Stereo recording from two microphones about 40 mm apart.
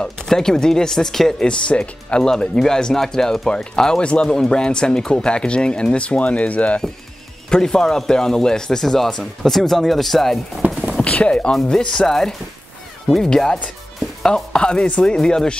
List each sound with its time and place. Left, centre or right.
0.3 s speech: centre
1.4 s speech: left
2.2 s speech: centre
4.0 s speech: left
7.4 s speech: centre
11.1 s speech: left
11.8 s speech: centre
13.3 s speech: centre